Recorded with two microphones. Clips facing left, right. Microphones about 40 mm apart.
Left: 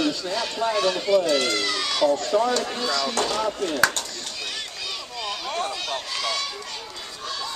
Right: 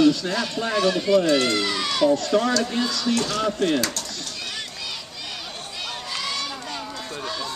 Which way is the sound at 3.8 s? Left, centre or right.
Left.